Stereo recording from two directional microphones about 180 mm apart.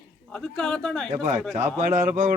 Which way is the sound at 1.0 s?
40° right (ahead or behind).